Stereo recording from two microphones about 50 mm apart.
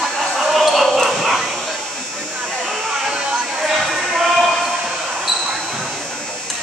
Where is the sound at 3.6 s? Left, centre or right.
Centre.